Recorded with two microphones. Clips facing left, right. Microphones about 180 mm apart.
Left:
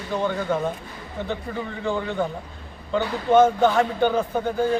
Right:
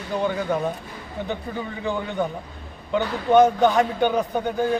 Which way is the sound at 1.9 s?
15° right (ahead or behind).